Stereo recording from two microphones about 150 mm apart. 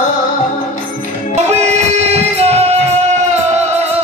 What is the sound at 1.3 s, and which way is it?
Music, 45° right (ahead or behind).